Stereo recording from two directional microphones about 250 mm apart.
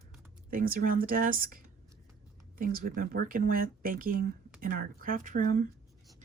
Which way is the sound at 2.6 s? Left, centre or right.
Right.